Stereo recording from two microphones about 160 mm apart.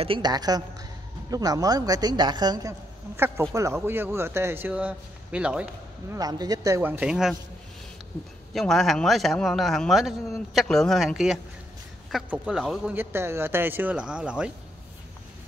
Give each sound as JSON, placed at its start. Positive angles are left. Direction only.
{"t": 0.0, "sound": "a man's voice", "side_deg": -30}
{"t": 6.1, "sound": "a man's voice", "side_deg": -25}
{"t": 8.5, "sound": "a man's voice", "side_deg": 0}